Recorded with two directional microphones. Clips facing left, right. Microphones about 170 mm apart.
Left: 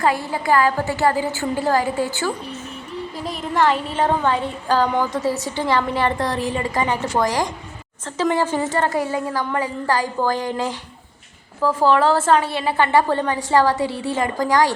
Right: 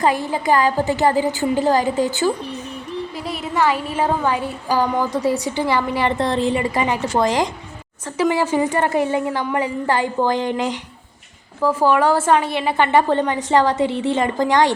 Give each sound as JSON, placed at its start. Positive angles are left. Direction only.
{"t": 0.0, "sound": "speech", "side_deg": -15}
{"t": 3.2, "sound": "speech", "side_deg": -5}
{"t": 8.2, "sound": "a woman's voice", "side_deg": -10}